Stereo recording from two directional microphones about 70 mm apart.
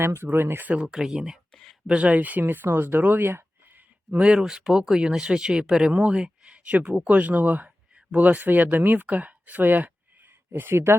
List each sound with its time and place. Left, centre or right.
0.0 s speech: right
0.9 s speech: centre
1.9 s speech: centre
4.2 s speech: centre; by 10.9 s right